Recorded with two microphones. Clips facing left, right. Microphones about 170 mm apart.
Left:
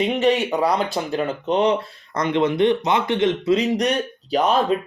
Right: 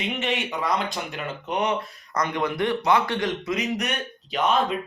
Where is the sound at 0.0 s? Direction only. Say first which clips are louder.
Left 9 dB; 35° left (ahead or behind).